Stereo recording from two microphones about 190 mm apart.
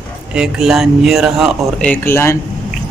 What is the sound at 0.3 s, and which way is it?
Speech, 5° right (ahead or behind).